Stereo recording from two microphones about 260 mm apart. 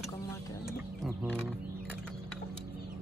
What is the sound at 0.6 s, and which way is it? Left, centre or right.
Chicken, centre.